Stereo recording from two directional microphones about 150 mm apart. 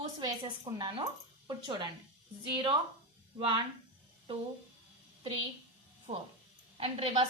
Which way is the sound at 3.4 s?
30° right (ahead or behind).